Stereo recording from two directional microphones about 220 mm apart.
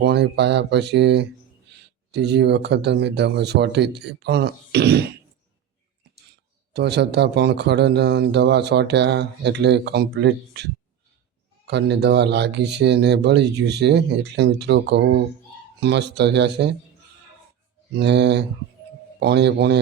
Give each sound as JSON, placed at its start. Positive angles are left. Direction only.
{"t": 0.0, "sound": "a man's voice", "side_deg": -50}
{"t": 6.7, "sound": "a man's voice", "side_deg": -50}
{"t": 17.9, "sound": "a man's voice", "side_deg": -50}